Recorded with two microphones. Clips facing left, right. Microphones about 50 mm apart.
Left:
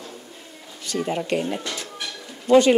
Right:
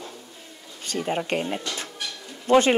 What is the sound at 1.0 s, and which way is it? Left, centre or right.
A woman's voice, right.